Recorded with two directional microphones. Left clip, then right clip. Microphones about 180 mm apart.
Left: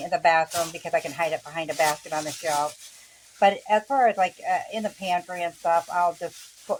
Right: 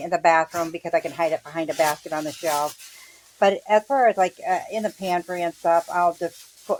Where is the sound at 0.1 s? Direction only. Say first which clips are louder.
Right 2 dB; 35° right (ahead or behind).